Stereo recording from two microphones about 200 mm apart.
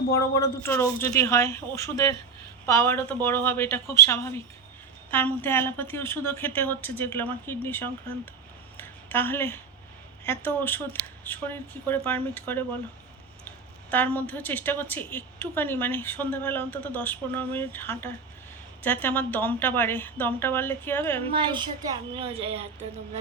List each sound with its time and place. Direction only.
0.3 s a woman's voice: 15° left (ahead or behind)
8.8 s a sound: 10° left (ahead or behind)
10.2 s a woman's voice: 10° left (ahead or behind)
13.9 s a woman's voice: 10° left (ahead or behind)
21.2 s a woman's voice: 25° right (ahead or behind)